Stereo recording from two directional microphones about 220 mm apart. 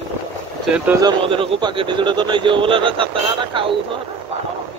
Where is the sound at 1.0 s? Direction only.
25° right (ahead or behind).